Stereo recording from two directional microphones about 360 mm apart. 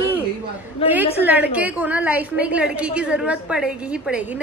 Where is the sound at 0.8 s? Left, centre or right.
Centre.